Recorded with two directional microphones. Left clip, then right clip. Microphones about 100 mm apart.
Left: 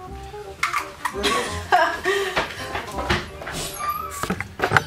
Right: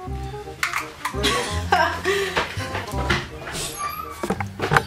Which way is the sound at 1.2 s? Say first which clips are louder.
Even; centre (ahead or behind).